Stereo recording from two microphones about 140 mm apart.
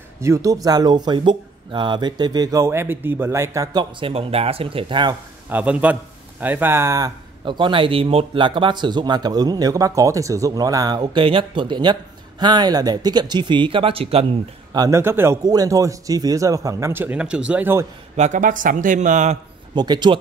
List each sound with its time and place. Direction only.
0.2 s speech: 20° right (ahead or behind)
4.0 s speech: 40° right (ahead or behind)
5.5 s speech: 10° right (ahead or behind)
7.4 s speech: 35° right (ahead or behind)
14.7 s speech: 25° right (ahead or behind)
18.1 s a man's voice: 60° right (ahead or behind)
19.7 s speech: 30° right (ahead or behind)